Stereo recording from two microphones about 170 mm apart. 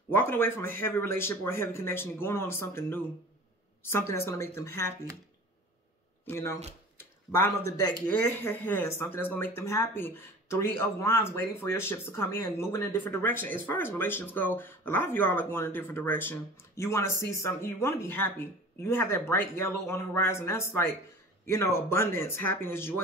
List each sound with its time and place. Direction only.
0.1 s speech: 15° left (ahead or behind)
6.2 s speech: 15° left (ahead or behind)